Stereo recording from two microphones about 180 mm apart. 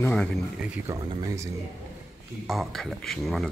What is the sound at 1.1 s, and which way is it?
Speech, 20° right (ahead or behind).